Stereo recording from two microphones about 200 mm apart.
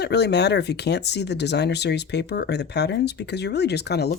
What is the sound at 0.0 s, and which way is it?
Speech, 55° left (ahead or behind).